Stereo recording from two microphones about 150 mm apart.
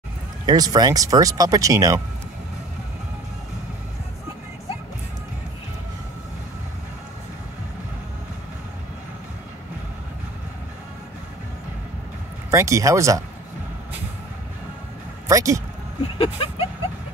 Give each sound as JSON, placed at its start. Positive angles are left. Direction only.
{"t": 0.5, "sound": "speech", "side_deg": -25}
{"t": 12.4, "sound": "speech", "side_deg": -20}
{"t": 15.2, "sound": "speech", "side_deg": -20}
{"t": 16.2, "sound": "a sound", "side_deg": 40}